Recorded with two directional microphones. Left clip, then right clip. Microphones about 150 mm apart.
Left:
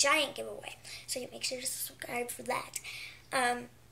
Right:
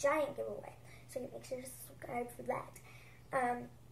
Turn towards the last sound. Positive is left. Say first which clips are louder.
# left 5 dB
turn(degrees=20)  # may be behind; listen again after turning